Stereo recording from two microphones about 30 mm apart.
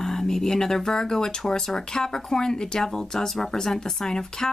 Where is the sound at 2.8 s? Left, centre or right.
Centre.